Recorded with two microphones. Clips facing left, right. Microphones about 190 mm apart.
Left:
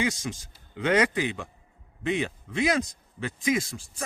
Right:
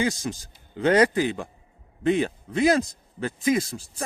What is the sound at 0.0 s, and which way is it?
A man's voice, 35° right (ahead or behind).